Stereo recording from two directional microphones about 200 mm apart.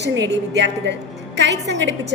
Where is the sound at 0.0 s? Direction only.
60° right (ahead or behind).